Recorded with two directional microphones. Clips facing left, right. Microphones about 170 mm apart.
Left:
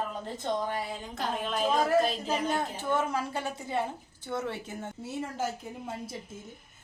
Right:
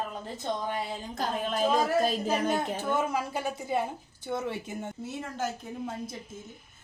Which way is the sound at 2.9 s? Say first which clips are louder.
Left 1 dB; 10° right (ahead or behind).